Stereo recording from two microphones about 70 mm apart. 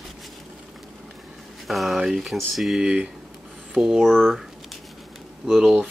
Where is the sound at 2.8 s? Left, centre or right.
Centre.